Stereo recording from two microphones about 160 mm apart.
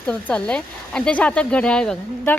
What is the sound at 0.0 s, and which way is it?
Speech, 5° left (ahead or behind).